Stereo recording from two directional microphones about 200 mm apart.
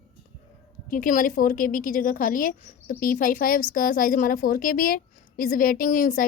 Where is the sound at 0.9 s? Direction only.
45° left (ahead or behind).